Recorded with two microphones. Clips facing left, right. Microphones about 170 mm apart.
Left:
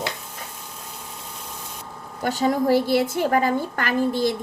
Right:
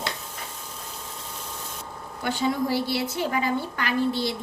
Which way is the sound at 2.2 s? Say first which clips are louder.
Left 5 dB; 45° left (ahead or behind).